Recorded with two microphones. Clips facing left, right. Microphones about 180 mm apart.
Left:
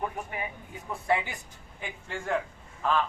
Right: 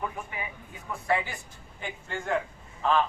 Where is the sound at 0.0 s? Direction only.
45° left (ahead or behind).